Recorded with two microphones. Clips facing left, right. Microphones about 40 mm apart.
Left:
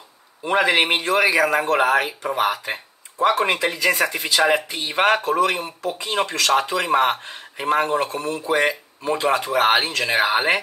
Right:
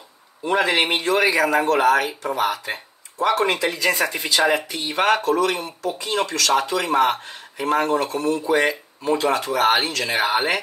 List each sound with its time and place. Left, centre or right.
0.4 s speech: centre
3.9 s speech: centre
4.6 s speech: left
8.5 s speech: centre; by 10.2 s left